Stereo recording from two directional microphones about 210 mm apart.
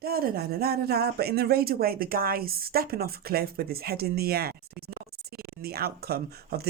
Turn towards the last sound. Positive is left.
turn(degrees=-50)  # may be behind; listen again after turning